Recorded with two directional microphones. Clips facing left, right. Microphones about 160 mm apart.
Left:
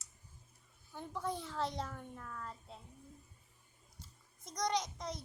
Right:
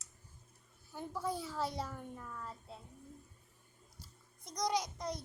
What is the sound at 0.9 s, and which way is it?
A child's voice, 5° right (ahead or behind).